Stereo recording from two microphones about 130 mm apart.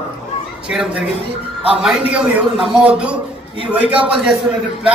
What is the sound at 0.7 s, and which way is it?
A man's voice, 5° right (ahead or behind).